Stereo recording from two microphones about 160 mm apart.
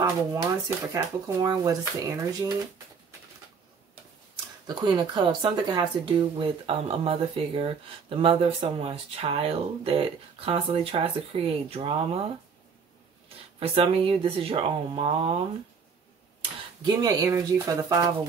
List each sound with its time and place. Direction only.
0.0 s speech: 20° right (ahead or behind)
4.6 s speech: 25° right (ahead or behind)
13.6 s speech: 35° right (ahead or behind)
16.3 s speech: 30° right (ahead or behind)